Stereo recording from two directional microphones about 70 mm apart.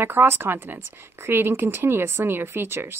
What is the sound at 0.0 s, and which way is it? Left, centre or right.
A woman's voice, right.